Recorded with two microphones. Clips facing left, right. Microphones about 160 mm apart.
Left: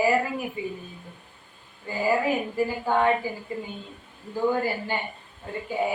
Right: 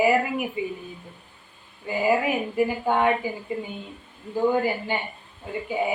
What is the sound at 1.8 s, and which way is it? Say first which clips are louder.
A woman's voice: right 2 dB; 15° right (ahead or behind).